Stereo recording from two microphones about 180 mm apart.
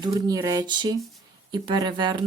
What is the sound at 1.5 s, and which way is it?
Speech, 25° right (ahead or behind).